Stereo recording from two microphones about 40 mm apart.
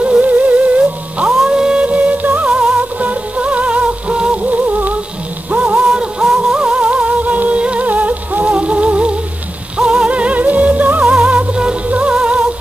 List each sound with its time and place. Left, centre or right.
0.0 s music: right
1.5 s music: right
1.9 s music: right
2.4 s music: right
2.8 s music: right
4.5 s music: right
5.9 s music: right
6.8 s music: right